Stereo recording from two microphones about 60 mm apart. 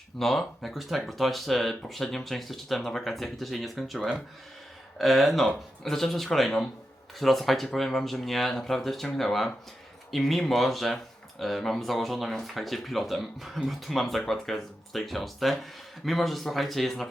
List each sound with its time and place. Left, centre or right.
0.2 s speech: centre